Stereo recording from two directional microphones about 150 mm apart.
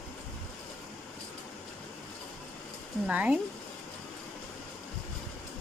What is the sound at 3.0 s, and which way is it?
Speech, 10° right (ahead or behind).